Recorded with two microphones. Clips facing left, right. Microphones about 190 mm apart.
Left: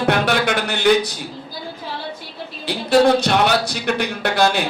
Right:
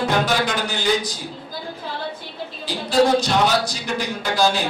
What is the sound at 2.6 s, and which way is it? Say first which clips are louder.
Speech: left 3 dB; 65° left (ahead or behind).